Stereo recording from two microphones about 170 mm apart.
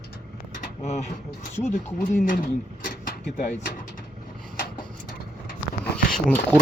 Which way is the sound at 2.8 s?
55° left (ahead or behind).